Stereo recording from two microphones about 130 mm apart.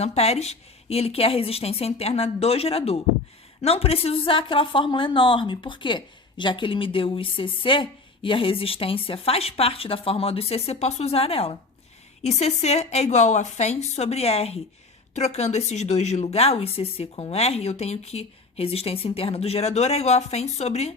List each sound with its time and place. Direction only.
0.0 s a woman's voice: 55° left (ahead or behind)
12.2 s a woman's voice: 55° left (ahead or behind)